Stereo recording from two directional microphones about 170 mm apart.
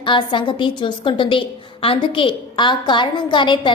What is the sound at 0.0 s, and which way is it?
A woman's voice, 30° left (ahead or behind).